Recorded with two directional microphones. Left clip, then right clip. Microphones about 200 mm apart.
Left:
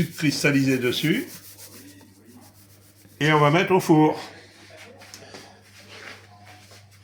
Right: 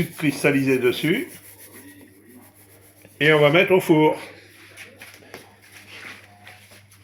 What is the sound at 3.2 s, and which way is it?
Speech, 45° left (ahead or behind).